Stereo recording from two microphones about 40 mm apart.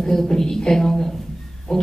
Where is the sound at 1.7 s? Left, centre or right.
Centre.